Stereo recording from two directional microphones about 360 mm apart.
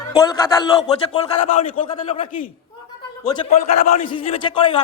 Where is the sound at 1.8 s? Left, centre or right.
Centre.